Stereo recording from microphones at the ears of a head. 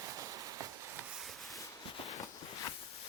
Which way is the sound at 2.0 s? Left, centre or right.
Left.